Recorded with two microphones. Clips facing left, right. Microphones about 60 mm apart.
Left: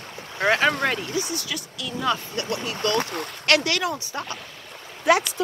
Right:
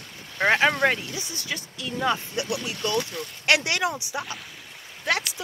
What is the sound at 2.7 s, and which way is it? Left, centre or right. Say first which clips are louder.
Speech: left 5 dB; left.